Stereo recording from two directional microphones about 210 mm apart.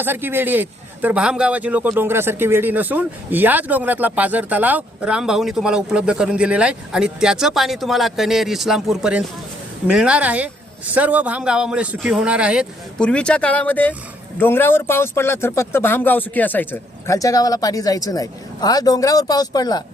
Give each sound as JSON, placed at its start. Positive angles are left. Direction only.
{"t": 0.0, "sound": "a man's voice", "side_deg": -10}